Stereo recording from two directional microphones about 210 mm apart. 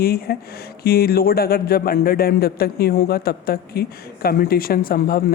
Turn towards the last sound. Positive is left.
turn(degrees=45)  # may be behind; listen again after turning